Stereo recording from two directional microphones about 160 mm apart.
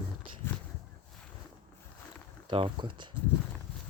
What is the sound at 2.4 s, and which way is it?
Speech, 30° right (ahead or behind).